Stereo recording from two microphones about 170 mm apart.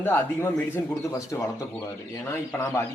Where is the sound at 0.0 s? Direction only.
15° left (ahead or behind).